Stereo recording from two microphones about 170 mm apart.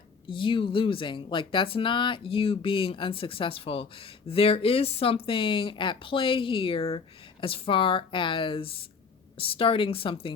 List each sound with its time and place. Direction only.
0.3 s speech: 30° left (ahead or behind)